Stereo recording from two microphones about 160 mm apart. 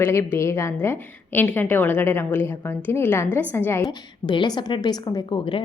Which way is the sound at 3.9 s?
30° left (ahead or behind).